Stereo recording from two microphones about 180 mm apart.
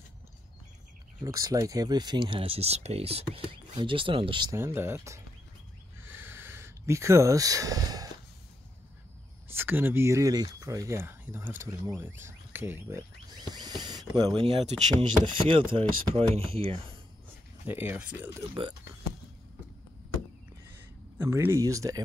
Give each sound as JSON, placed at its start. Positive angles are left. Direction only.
{"t": 1.2, "sound": "speech", "side_deg": -20}
{"t": 4.6, "sound": "speech", "side_deg": -15}
{"t": 6.0, "sound": "a sound", "side_deg": -10}
{"t": 9.5, "sound": "speech", "side_deg": -10}
{"t": 14.4, "sound": "speech", "side_deg": -35}
{"t": 17.6, "sound": "speech", "side_deg": -10}
{"t": 18.5, "sound": "speech", "side_deg": -25}
{"t": 21.2, "sound": "speech", "side_deg": -15}